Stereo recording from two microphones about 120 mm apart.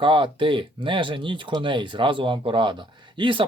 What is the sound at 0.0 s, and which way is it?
Speech, 45° right (ahead or behind).